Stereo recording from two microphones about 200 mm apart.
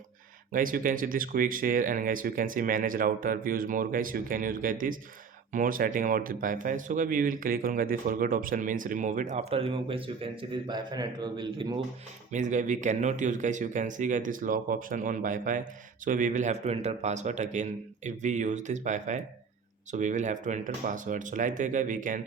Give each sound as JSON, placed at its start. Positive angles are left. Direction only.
{"t": 0.5, "sound": "speech", "side_deg": -45}
{"t": 12.3, "sound": "speech", "side_deg": -40}